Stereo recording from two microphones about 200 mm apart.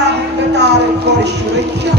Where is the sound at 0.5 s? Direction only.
60° right (ahead or behind).